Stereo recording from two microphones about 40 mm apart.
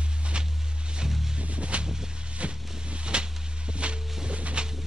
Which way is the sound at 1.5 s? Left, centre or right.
Right.